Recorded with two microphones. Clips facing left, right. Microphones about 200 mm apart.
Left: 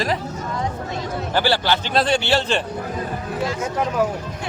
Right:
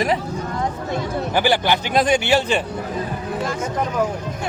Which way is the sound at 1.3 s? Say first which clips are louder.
Right 1 dB; 15° right (ahead or behind).